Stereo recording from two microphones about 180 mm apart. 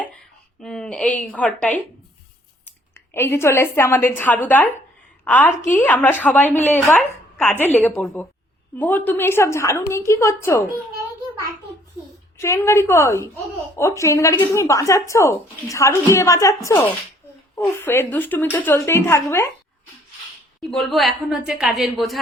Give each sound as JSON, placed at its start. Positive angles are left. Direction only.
{"t": 0.6, "sound": "a woman's voice", "side_deg": 5}
{"t": 2.9, "sound": "a woman's voice", "side_deg": 15}
{"t": 12.4, "sound": "a woman's voice", "side_deg": 15}
{"t": 20.7, "sound": "a woman's voice", "side_deg": 0}